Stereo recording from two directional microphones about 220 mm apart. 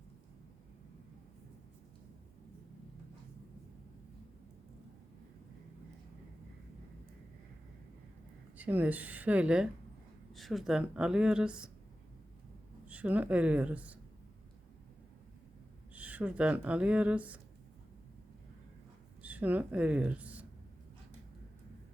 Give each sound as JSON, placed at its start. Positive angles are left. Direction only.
{"t": 8.5, "sound": "speech", "side_deg": -5}
{"t": 12.9, "sound": "speech", "side_deg": -5}
{"t": 16.0, "sound": "speech", "side_deg": -5}
{"t": 19.2, "sound": "speech", "side_deg": -5}